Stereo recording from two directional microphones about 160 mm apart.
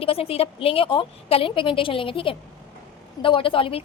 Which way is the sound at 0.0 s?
35° left (ahead or behind).